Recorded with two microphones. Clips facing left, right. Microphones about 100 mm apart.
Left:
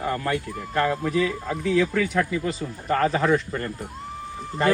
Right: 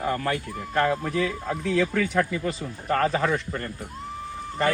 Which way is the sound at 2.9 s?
15° left (ahead or behind).